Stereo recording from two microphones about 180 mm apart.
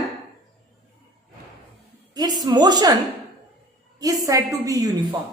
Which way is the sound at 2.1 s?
20° right (ahead or behind).